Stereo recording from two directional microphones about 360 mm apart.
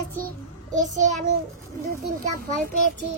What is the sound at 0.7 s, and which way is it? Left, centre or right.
Child singing, centre.